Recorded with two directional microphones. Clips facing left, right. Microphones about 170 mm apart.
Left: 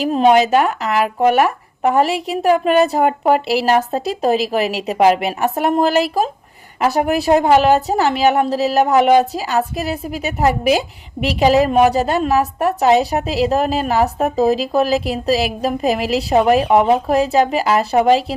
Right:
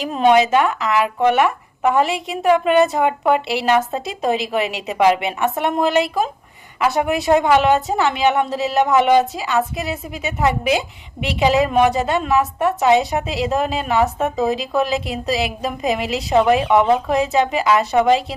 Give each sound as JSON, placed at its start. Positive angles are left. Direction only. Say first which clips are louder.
{"t": 0.1, "sound": "a woman's voice", "louder": "left 1 dB", "side_deg": 40}
{"t": 11.3, "sound": "a woman's voice", "louder": "left 3 dB", "side_deg": 40}